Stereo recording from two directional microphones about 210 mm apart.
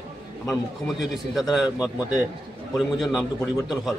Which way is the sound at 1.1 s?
Centre (ahead or behind).